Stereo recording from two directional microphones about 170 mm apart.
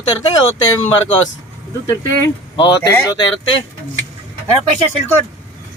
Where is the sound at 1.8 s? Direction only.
20° left (ahead or behind).